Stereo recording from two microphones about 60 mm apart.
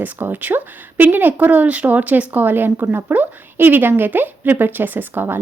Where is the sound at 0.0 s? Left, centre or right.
Right.